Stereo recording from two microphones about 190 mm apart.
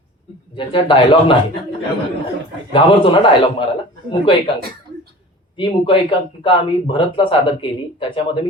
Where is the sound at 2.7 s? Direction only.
25° left (ahead or behind).